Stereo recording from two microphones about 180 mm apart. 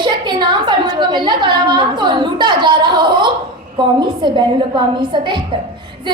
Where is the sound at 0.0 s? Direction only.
25° right (ahead or behind).